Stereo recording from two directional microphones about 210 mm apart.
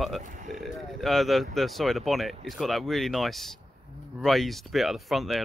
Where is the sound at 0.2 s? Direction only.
35° right (ahead or behind).